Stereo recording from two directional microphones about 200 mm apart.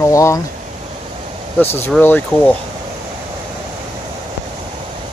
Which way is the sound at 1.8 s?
10° left (ahead or behind).